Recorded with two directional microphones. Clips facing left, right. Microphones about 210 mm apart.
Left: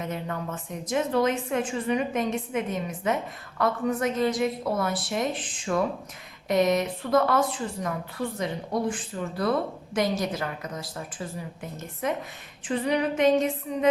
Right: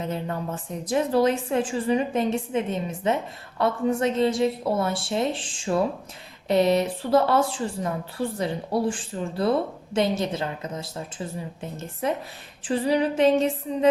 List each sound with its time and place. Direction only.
0.0 s a woman's voice: 30° right (ahead or behind)